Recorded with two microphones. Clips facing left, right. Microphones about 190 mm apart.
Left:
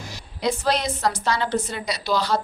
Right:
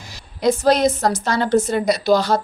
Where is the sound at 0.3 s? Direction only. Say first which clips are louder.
Right 7 dB; 45° right (ahead or behind).